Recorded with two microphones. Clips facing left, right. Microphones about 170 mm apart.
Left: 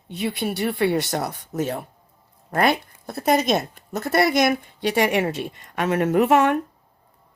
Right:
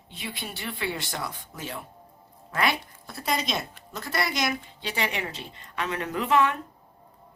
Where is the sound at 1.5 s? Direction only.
50° left (ahead or behind).